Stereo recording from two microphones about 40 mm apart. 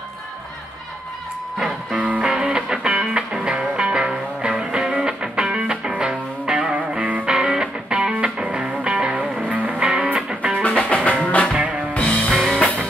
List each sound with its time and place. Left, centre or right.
2.0 s music: right
2.2 s music: centre
9.4 s music: right
9.8 s music: right
10.8 s music: left
12.0 s music: left
12.3 s music: centre